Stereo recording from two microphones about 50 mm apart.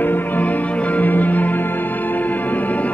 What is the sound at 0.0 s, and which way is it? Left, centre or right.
Music, left.